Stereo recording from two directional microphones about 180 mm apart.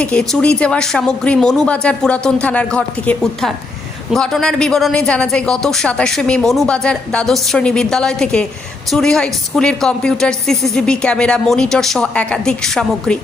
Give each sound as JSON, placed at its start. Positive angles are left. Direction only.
{"t": 0.0, "sound": "speech", "side_deg": 5}